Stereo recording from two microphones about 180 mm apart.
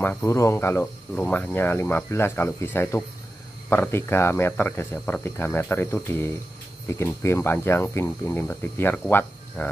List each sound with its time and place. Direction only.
0.0 s speech: 10° left (ahead or behind)